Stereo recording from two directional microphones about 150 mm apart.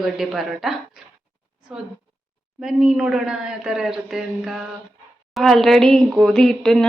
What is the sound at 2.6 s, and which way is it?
A woman's voice, 5° right (ahead or behind).